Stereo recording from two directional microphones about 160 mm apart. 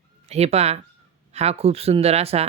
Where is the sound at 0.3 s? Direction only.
40° right (ahead or behind).